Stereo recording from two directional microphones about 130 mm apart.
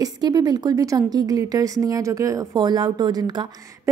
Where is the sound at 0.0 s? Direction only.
30° right (ahead or behind).